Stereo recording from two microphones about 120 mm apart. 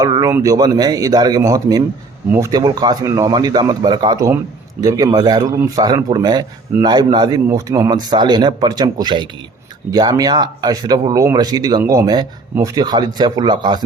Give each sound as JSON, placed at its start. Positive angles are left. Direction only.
{"t": 0.0, "sound": "speech", "side_deg": -30}
{"t": 7.4, "sound": "speech", "side_deg": -25}